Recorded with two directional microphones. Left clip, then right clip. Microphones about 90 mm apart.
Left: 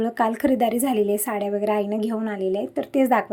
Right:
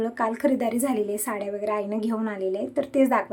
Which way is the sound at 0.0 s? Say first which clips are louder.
Left 3 dB; 40° left (ahead or behind).